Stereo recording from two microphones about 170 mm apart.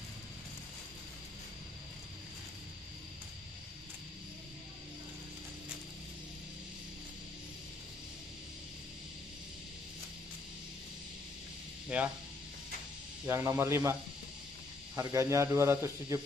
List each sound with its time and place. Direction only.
11.9 s speech: 10° right (ahead or behind)
13.3 s a man's voice: 15° right (ahead or behind)
15.0 s a man's voice: 15° right (ahead or behind)